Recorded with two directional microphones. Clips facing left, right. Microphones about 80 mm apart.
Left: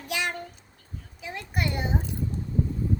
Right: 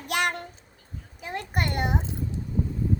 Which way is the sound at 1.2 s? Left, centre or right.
Right.